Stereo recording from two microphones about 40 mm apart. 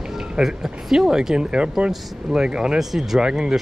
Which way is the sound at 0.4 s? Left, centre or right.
Centre.